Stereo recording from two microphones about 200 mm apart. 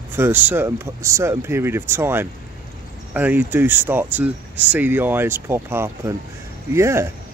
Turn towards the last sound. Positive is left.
turn(degrees=-15)  # may be behind; listen again after turning